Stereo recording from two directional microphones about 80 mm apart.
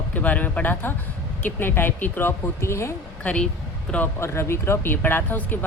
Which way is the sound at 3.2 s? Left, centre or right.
Centre.